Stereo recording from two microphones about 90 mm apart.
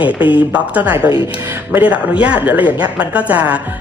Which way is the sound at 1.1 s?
70° left (ahead or behind).